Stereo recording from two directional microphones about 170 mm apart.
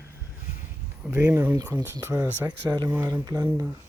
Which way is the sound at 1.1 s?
15° right (ahead or behind).